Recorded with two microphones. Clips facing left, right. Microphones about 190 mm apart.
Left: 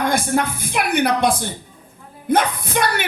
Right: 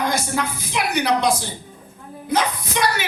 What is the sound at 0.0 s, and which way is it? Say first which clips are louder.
A woman's voice: left 4 dB; 55° left (ahead or behind).